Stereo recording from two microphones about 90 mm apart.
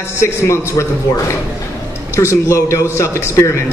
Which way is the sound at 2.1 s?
35° left (ahead or behind).